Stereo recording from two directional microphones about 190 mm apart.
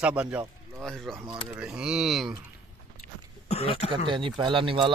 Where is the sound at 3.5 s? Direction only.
30° left (ahead or behind).